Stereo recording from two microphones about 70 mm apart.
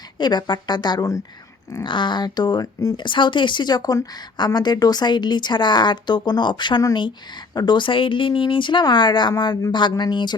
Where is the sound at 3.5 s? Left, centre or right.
Left.